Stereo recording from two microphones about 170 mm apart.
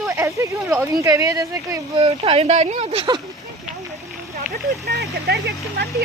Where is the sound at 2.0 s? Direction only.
35° right (ahead or behind).